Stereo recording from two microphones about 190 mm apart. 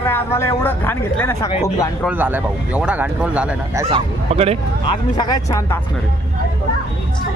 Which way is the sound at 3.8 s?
30° right (ahead or behind).